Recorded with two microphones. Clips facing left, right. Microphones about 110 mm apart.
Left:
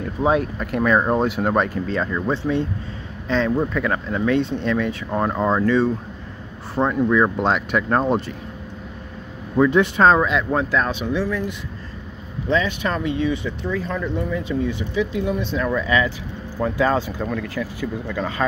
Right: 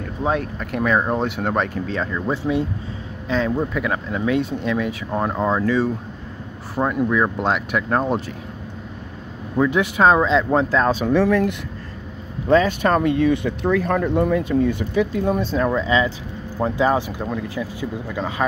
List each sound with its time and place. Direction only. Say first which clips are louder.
0.2 s speech: left 3 dB; 5° left (ahead or behind)
2.3 s speech: even; 10° right (ahead or behind)
9.6 s speech: left 2 dB; 5° right (ahead or behind)
10.2 s speech: right 3 dB; 30° right (ahead or behind)
11.1 s speech: right 8 dB; 65° right (ahead or behind)
12.4 s speech: right 5 dB; 45° right (ahead or behind)
15.8 s speech: right 1 dB; 20° right (ahead or behind)